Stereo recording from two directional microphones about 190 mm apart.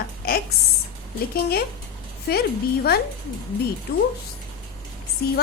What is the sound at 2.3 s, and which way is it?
Speech, 55° left (ahead or behind).